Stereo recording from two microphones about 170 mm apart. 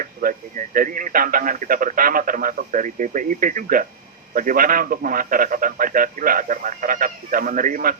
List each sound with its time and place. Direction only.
0.0 s speech: 55° right (ahead or behind)